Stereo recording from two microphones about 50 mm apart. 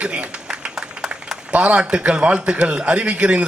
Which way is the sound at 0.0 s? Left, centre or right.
Right.